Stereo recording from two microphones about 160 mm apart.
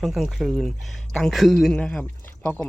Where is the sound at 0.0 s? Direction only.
Centre (ahead or behind).